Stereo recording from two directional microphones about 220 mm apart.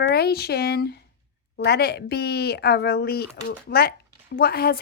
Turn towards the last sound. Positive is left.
turn(degrees=45)  # may be behind; listen again after turning